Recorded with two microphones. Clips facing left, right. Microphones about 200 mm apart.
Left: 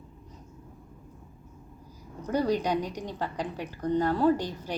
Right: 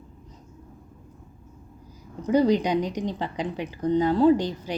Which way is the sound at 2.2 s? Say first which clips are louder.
Right 6 dB; 15° right (ahead or behind).